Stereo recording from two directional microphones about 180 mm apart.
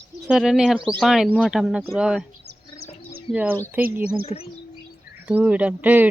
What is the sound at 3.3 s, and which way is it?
Speech, 10° right (ahead or behind).